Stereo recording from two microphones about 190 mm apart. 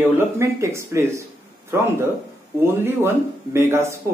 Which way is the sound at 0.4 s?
15° right (ahead or behind).